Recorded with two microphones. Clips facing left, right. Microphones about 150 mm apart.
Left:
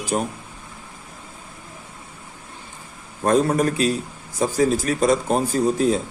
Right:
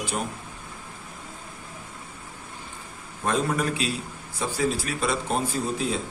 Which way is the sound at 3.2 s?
40° left (ahead or behind).